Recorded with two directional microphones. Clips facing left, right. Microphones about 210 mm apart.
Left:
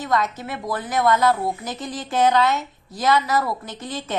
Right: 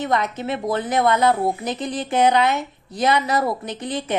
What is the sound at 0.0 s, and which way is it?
A woman's voice, 20° right (ahead or behind).